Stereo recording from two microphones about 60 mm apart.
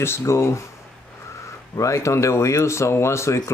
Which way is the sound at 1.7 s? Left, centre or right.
Left.